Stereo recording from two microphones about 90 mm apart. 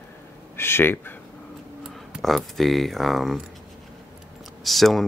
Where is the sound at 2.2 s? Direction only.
Centre (ahead or behind).